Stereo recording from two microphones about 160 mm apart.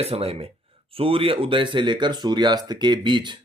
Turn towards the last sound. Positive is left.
turn(degrees=-30)  # may be behind; listen again after turning